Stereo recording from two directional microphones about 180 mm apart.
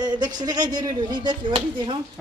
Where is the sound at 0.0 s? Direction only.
20° right (ahead or behind).